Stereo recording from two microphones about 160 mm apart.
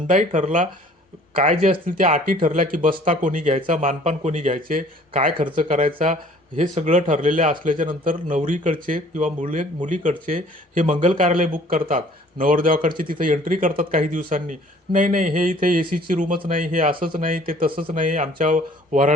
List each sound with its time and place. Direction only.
0.3 s speech: 50° right (ahead or behind)